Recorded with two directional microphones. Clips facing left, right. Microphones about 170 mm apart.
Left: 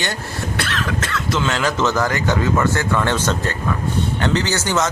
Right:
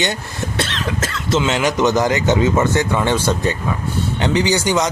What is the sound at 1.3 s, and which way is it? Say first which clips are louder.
Speech: right 4 dB; 20° right (ahead or behind).